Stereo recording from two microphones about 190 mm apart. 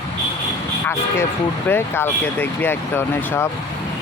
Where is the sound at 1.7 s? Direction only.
10° left (ahead or behind).